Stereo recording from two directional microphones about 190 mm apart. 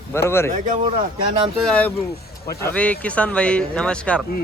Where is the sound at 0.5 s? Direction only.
40° right (ahead or behind).